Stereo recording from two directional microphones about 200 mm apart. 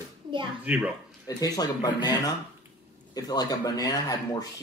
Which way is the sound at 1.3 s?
20° left (ahead or behind).